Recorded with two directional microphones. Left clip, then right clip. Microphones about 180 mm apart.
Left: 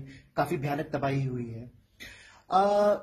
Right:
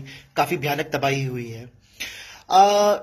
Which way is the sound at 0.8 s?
15° left (ahead or behind).